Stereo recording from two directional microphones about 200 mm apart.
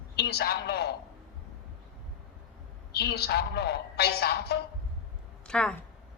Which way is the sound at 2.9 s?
55° left (ahead or behind).